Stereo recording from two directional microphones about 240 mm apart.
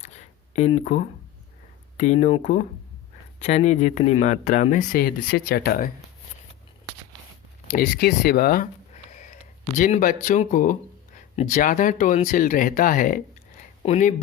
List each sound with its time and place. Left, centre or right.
0.0 s a sound: left
2.0 s speech: left
7.7 s speech: left